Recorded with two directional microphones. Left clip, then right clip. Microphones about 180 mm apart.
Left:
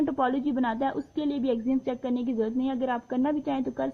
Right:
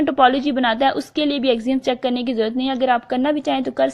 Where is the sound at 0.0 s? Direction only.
20° right (ahead or behind).